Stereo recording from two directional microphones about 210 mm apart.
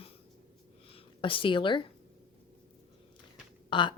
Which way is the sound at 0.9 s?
25° left (ahead or behind).